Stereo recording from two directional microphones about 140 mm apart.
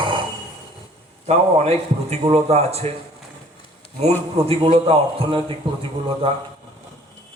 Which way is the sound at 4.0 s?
45° right (ahead or behind).